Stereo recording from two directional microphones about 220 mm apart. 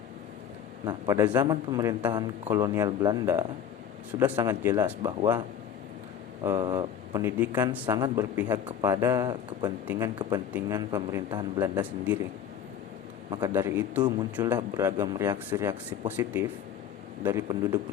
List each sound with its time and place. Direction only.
0.9 s speech: 15° right (ahead or behind)
6.4 s speech: 15° right (ahead or behind)
13.3 s speech: 15° right (ahead or behind)